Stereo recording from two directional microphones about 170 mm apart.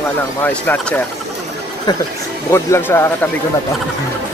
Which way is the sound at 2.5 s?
15° left (ahead or behind).